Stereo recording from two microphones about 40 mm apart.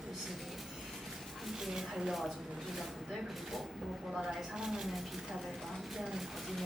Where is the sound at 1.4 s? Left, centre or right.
Centre.